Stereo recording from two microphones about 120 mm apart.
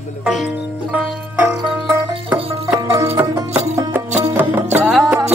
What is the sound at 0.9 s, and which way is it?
Music, 20° right (ahead or behind).